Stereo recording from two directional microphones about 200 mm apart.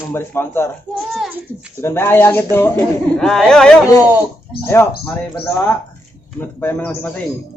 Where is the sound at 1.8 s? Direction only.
10° left (ahead or behind).